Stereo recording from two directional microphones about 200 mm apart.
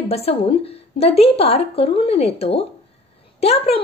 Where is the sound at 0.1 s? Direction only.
30° left (ahead or behind).